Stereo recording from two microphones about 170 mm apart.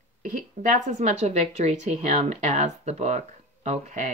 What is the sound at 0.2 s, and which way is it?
A woman's voice, 55° right (ahead or behind).